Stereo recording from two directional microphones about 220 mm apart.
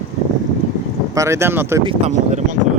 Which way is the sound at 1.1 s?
15° right (ahead or behind).